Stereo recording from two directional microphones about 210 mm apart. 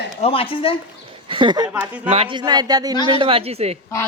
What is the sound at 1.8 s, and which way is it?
Speech, 5° right (ahead or behind).